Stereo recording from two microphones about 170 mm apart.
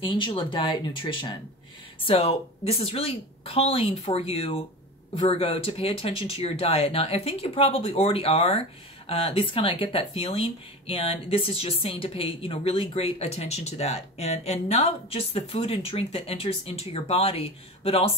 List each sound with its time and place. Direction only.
0.0 s speech: 30° left (ahead or behind)